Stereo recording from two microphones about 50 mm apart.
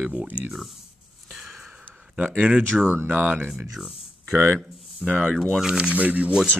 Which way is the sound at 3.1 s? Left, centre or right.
Right.